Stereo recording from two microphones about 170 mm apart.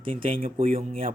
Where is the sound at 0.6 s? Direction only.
50° right (ahead or behind).